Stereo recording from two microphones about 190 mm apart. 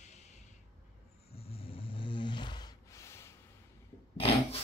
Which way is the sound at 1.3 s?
30° left (ahead or behind).